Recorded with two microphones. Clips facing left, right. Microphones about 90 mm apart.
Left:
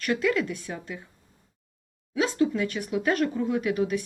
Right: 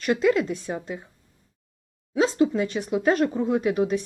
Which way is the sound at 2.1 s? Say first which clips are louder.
Right 3 dB; 25° right (ahead or behind).